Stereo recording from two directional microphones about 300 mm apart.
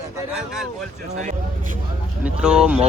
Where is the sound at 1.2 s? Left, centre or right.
Right.